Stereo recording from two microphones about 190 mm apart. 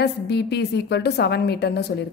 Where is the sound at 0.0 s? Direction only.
60° left (ahead or behind).